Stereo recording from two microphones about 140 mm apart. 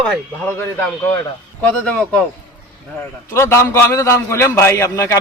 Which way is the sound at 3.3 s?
20° left (ahead or behind).